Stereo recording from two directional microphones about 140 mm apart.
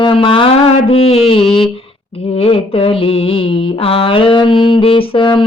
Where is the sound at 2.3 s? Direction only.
40° left (ahead or behind).